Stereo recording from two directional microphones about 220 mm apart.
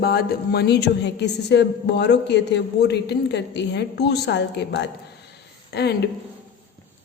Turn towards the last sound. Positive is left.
turn(degrees=50)  # may be behind; listen again after turning